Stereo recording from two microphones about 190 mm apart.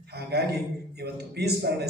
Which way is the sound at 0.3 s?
60° right (ahead or behind).